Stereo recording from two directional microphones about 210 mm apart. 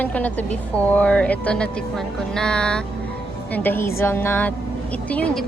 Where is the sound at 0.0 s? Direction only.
5° left (ahead or behind).